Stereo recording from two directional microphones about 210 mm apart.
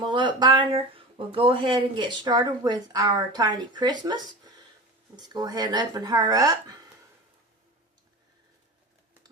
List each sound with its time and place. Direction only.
0.0 s speech: 20° right (ahead or behind)